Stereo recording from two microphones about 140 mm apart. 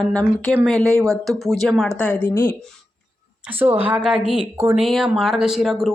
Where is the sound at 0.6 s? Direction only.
5° left (ahead or behind).